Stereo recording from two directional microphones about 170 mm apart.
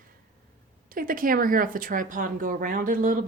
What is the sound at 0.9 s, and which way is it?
Speech, 55° right (ahead or behind).